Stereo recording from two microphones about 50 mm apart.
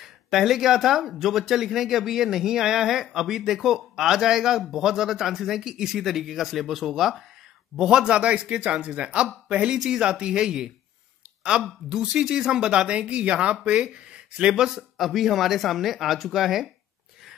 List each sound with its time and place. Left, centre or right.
0.0 s a man's voice: centre